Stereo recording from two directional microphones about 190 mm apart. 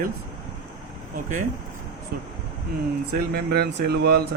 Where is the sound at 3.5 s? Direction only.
60° right (ahead or behind).